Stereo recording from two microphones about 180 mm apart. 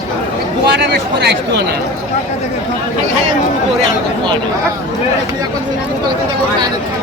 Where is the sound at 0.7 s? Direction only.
70° right (ahead or behind).